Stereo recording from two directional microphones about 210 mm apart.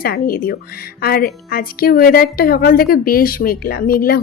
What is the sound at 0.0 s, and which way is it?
A woman's voice, 45° left (ahead or behind).